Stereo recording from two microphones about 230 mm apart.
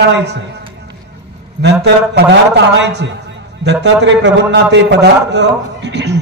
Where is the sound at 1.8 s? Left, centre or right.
Right.